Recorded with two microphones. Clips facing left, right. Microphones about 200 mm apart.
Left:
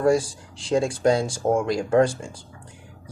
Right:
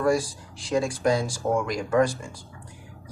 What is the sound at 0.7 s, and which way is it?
Speech, 30° left (ahead or behind).